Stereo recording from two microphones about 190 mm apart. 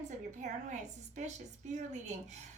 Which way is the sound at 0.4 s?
40° right (ahead or behind).